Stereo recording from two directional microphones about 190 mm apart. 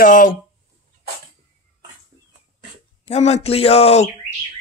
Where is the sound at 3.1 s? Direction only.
35° left (ahead or behind).